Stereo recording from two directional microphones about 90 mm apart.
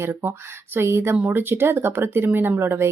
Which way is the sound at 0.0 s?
25° right (ahead or behind).